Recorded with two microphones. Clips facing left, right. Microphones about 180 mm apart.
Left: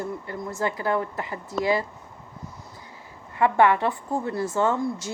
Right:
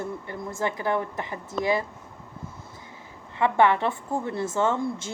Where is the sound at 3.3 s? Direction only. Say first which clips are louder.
Left 1 dB; 20° right (ahead or behind).